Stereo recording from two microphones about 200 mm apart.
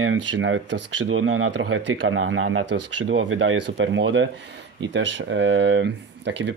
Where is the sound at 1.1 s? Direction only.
90° right.